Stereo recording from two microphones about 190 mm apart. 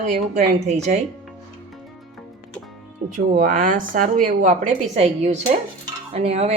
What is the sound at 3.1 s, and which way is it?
A woman's voice, 45° right (ahead or behind).